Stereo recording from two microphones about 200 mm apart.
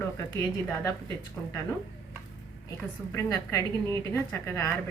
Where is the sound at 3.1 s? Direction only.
15° left (ahead or behind).